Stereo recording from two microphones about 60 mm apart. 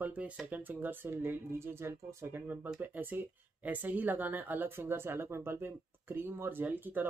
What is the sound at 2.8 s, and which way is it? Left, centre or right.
Speech, right.